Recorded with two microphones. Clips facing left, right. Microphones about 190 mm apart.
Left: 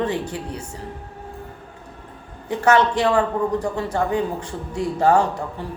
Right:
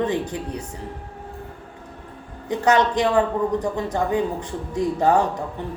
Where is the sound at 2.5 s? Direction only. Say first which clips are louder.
Left 1 dB; 15° right (ahead or behind).